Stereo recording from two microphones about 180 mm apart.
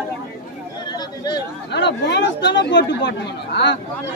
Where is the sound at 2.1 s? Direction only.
75° left (ahead or behind).